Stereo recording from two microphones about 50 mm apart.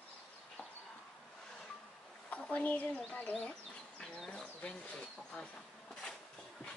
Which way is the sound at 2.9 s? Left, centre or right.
Centre.